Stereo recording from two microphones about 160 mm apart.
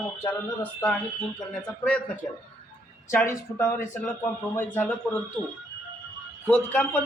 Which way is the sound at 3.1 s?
15° left (ahead or behind).